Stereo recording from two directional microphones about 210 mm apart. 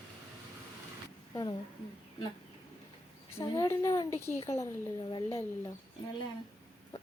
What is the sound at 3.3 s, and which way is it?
A woman's voice, 15° left (ahead or behind).